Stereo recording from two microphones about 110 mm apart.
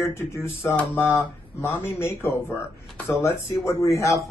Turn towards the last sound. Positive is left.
turn(degrees=30)  # may be behind; listen again after turning